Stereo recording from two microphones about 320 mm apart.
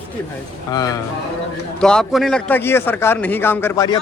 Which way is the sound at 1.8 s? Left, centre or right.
Centre.